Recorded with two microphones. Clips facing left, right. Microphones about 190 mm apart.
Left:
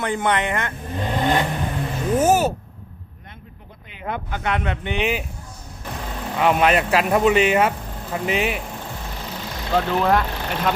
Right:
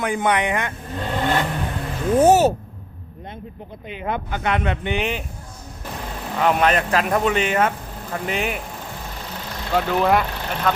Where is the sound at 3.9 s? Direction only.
20° right (ahead or behind).